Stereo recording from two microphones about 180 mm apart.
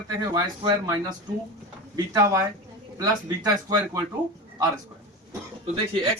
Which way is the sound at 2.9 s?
20° right (ahead or behind).